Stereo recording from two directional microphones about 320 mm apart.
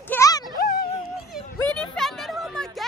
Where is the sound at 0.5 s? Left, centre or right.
Left.